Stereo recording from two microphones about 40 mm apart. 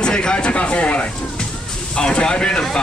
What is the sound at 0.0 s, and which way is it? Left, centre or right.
Speech, left.